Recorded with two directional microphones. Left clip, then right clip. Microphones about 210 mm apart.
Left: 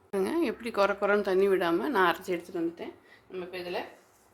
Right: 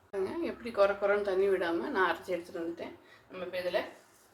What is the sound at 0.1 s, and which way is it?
Speech, 55° left (ahead or behind).